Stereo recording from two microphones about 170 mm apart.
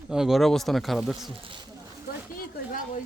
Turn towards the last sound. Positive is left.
turn(degrees=55)  # may be behind; listen again after turning